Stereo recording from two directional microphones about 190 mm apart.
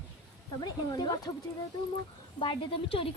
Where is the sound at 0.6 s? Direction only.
20° left (ahead or behind).